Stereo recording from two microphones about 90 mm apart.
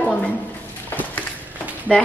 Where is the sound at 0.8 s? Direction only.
20° left (ahead or behind).